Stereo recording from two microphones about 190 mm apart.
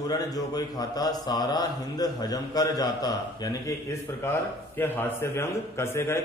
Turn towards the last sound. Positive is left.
turn(degrees=15)  # may be behind; listen again after turning